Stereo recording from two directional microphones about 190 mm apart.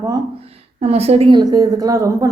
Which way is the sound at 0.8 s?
35° right (ahead or behind).